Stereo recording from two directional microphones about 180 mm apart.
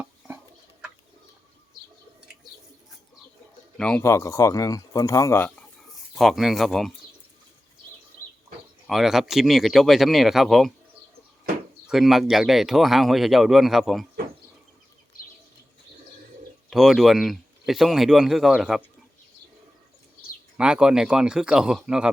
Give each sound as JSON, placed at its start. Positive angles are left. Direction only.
{"t": 0.0, "sound": "fowl", "side_deg": -10}
{"t": 3.8, "sound": "speech", "side_deg": 5}
{"t": 5.9, "sound": "speech", "side_deg": 0}
{"t": 8.9, "sound": "speech", "side_deg": 0}
{"t": 11.9, "sound": "speech", "side_deg": 0}
{"t": 16.6, "sound": "speech", "side_deg": 0}
{"t": 20.6, "sound": "speech", "side_deg": -5}